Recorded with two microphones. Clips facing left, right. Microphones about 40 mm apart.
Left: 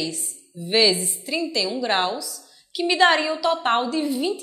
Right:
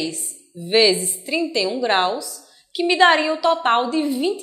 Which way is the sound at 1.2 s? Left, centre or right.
Centre.